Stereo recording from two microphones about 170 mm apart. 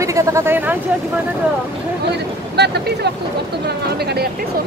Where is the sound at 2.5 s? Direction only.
75° right (ahead or behind).